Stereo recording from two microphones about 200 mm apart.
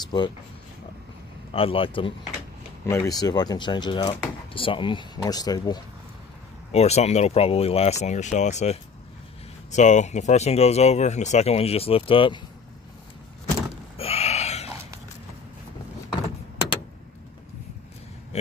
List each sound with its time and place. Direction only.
0.1 s speech: 20° left (ahead or behind)
1.5 s speech: 25° left (ahead or behind)
6.7 s speech: 30° left (ahead or behind)
13.9 s a sound: 30° left (ahead or behind)